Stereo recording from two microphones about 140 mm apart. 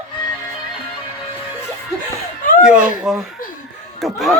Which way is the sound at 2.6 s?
5° right (ahead or behind).